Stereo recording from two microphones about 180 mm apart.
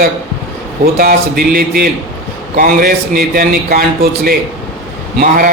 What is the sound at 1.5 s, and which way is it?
A man's voice, 55° right (ahead or behind).